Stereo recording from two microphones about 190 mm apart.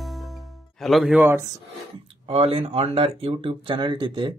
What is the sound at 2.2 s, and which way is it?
Speech, 30° right (ahead or behind).